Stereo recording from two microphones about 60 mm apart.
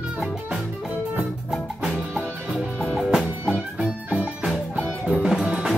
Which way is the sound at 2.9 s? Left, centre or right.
Centre.